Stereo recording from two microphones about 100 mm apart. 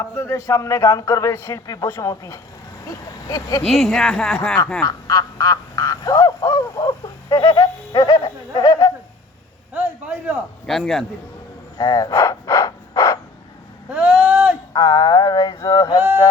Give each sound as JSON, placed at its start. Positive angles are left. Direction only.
{"t": 0.0, "sound": "a man's voice", "side_deg": 25}
{"t": 3.7, "sound": "speech", "side_deg": 0}
{"t": 4.8, "sound": "frog", "side_deg": 35}
{"t": 9.7, "sound": "a sound", "side_deg": -20}
{"t": 10.7, "sound": "speech", "side_deg": 0}
{"t": 11.8, "sound": "a sound", "side_deg": 40}
{"t": 13.9, "sound": "vehicle", "side_deg": -20}
{"t": 14.7, "sound": "a sound", "side_deg": 40}
{"t": 15.5, "sound": "a man's voice", "side_deg": 35}